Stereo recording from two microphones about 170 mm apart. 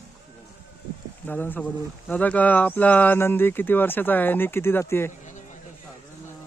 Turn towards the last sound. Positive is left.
turn(degrees=15)  # may be behind; listen again after turning